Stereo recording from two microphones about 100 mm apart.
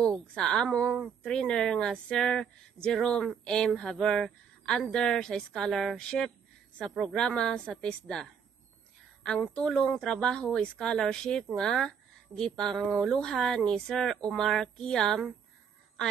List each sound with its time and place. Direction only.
0.3 s speech: 5° left (ahead or behind)